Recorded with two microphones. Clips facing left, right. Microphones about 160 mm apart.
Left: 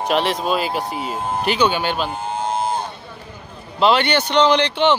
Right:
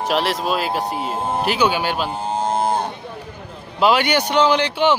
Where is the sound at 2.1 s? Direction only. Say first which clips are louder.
Right 2 dB; 35° right (ahead or behind); by 2.9 s 55° right (ahead or behind).